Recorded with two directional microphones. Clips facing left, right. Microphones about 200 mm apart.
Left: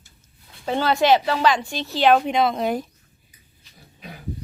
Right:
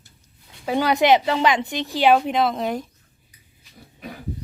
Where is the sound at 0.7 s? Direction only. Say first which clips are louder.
Right 1 dB; 15° right (ahead or behind).